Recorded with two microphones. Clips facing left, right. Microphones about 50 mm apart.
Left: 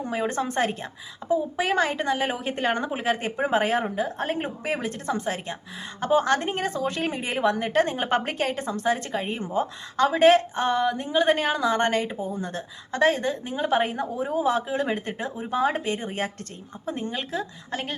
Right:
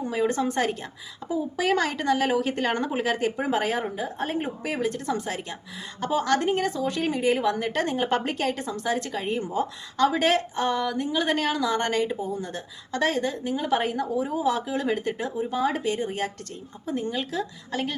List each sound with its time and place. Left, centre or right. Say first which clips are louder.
0.0 s a woman's voice: right 2 dB; left